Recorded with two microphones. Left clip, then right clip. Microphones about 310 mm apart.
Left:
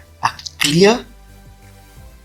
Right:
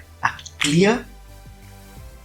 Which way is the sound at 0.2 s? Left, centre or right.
Left.